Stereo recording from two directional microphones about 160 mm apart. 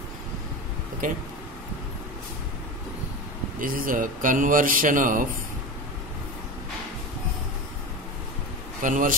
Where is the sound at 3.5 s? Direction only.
60° right (ahead or behind).